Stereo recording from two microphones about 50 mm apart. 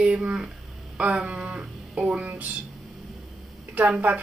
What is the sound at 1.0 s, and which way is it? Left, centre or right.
Speech, right.